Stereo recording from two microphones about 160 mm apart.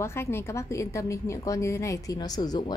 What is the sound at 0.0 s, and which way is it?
A woman's voice, 15° left (ahead or behind).